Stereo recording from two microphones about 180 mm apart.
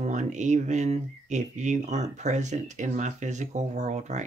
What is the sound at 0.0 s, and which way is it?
Speech, 40° right (ahead or behind).